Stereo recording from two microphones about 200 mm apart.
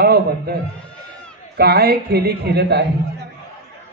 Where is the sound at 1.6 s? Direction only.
50° right (ahead or behind).